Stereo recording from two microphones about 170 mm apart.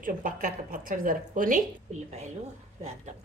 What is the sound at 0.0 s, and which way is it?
A woman's voice, 50° right (ahead or behind).